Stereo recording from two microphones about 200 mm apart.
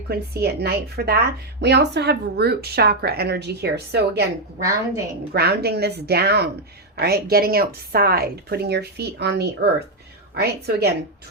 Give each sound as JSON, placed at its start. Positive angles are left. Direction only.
{"t": 0.1, "sound": "a woman's voice", "side_deg": -55}
{"t": 5.3, "sound": "a woman's voice", "side_deg": -55}